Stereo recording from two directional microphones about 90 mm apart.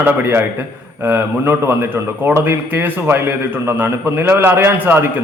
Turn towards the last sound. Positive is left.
turn(degrees=-25)  # may be behind; listen again after turning